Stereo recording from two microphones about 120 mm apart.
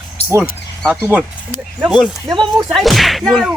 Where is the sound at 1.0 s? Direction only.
15° right (ahead or behind).